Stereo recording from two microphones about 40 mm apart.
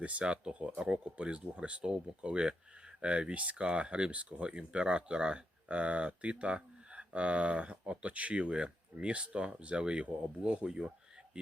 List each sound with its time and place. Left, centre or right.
0.0 s speech: right